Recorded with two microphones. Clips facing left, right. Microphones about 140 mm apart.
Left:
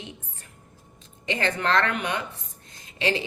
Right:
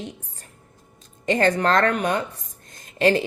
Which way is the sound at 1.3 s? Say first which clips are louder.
Right 6 dB; 45° right (ahead or behind).